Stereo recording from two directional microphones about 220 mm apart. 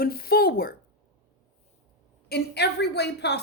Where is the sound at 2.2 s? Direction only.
50° left (ahead or behind).